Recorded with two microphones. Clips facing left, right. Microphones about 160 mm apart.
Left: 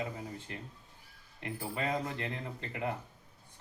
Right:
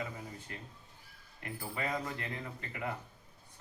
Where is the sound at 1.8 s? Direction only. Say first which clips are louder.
Left 2 dB; 25° left (ahead or behind).